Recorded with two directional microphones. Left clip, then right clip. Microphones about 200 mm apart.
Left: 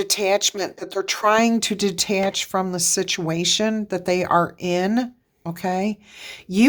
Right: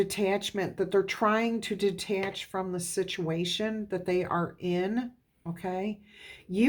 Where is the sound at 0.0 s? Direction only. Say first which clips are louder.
Left 9 dB; 35° left (ahead or behind).